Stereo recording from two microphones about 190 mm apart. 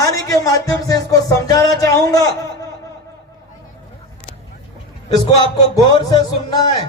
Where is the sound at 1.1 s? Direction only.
20° left (ahead or behind).